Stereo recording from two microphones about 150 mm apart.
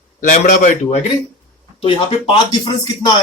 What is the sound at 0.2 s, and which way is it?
Speech, 60° left (ahead or behind).